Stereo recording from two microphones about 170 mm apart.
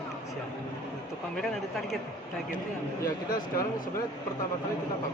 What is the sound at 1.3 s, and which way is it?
Speech, centre (ahead or behind).